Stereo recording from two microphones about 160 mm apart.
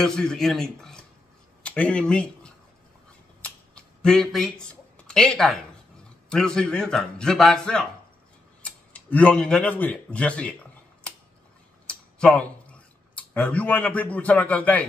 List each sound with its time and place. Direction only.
0.0 s a man's voice: 5° left (ahead or behind)
3.4 s a sound: 5° left (ahead or behind)
6.2 s a man's voice: 5° left (ahead or behind)
8.6 s tick-tock: 10° left (ahead or behind)
11.9 s speech: 5° left (ahead or behind)